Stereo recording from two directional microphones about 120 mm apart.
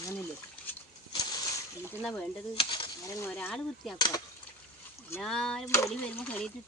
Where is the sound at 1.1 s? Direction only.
40° left (ahead or behind).